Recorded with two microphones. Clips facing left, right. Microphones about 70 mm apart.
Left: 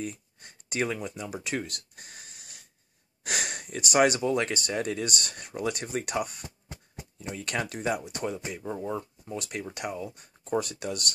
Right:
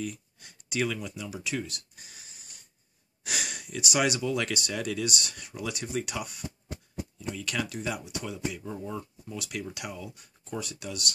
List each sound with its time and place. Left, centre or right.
0.0 s speech: left
6.7 s a sound: left
7.6 s speech: left
8.5 s speech: left